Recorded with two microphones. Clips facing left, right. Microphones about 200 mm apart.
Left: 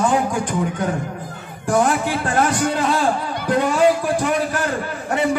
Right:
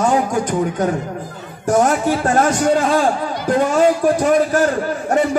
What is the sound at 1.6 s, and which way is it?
A man's voice, 45° right (ahead or behind).